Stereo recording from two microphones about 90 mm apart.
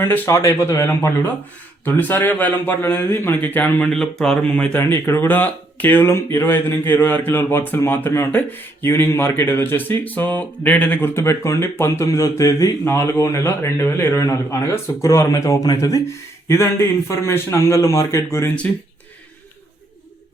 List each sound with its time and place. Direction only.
0.0 s speech: 30° left (ahead or behind)
1.8 s speech: 20° left (ahead or behind)
3.9 s speech: 5° left (ahead or behind)
4.8 s speech: 25° left (ahead or behind)
11.1 s speech: 30° left (ahead or behind)
17.1 s speech: 30° left (ahead or behind)